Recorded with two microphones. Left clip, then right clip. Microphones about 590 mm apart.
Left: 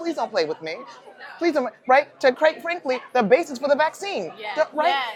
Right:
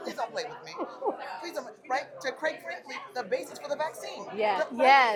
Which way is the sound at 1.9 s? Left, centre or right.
Left.